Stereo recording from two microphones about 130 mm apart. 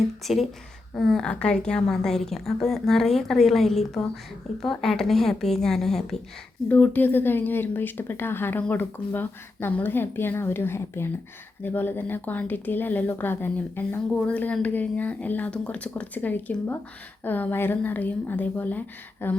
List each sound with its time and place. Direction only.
0.2 s a woman's voice: centre (ahead or behind)